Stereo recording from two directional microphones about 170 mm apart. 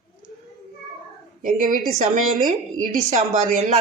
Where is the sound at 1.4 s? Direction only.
50° right (ahead or behind).